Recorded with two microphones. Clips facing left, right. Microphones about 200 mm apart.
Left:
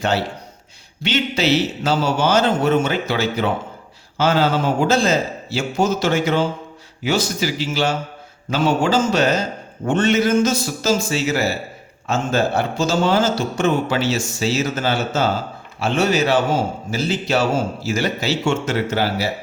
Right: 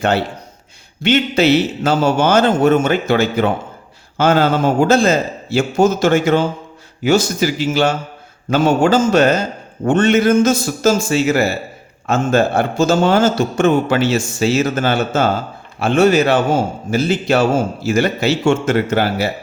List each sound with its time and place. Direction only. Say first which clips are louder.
0.0 s a man's voice: right 4 dB; 55° right (ahead or behind)